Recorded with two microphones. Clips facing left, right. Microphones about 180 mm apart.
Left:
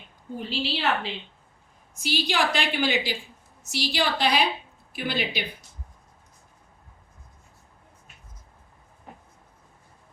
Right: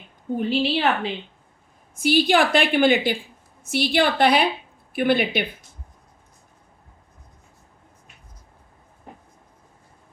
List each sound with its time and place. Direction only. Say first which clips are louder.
0.3 s a woman's voice: right 8 dB; 55° right (ahead or behind)